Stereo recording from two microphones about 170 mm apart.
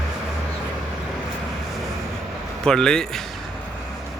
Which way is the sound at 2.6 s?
5° left (ahead or behind).